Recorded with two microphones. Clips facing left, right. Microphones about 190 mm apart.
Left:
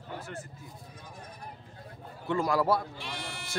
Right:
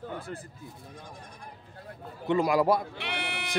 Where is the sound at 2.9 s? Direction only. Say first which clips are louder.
Right 5 dB; 65° right (ahead or behind).